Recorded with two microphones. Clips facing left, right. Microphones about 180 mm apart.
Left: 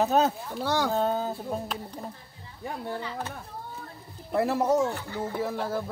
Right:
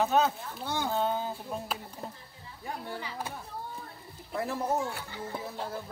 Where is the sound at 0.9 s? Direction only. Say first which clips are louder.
Left 4 dB; 40° left (ahead or behind).